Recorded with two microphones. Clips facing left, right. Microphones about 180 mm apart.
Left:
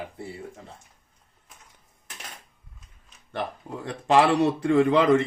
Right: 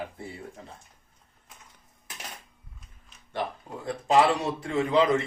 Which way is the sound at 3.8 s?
80° left.